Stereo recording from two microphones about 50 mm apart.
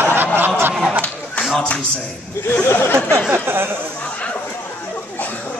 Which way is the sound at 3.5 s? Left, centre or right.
Right.